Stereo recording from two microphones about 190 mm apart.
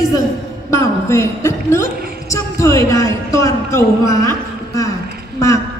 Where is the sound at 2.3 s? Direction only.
15° left (ahead or behind).